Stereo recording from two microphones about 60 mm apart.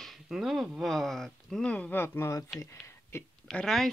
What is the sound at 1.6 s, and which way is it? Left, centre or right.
Speech, left.